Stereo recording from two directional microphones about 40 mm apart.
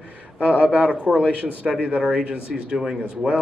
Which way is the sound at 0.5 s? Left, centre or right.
Right.